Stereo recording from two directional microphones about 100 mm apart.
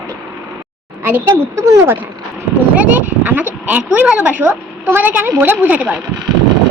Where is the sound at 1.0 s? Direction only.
25° right (ahead or behind).